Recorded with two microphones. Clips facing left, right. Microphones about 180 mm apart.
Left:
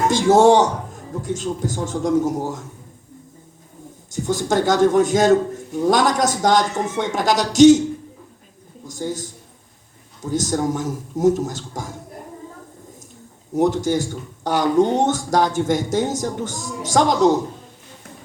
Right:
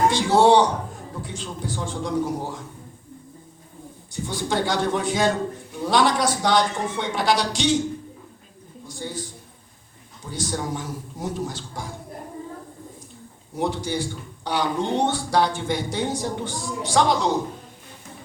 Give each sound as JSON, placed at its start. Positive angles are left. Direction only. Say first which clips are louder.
{"t": 0.1, "sound": "speech", "louder": "left 4 dB", "side_deg": 45}
{"t": 4.1, "sound": "speech", "louder": "left 6 dB", "side_deg": 45}
{"t": 8.9, "sound": "speech", "louder": "left 6 dB", "side_deg": 45}
{"t": 13.5, "sound": "speech", "louder": "left 8 dB", "side_deg": 45}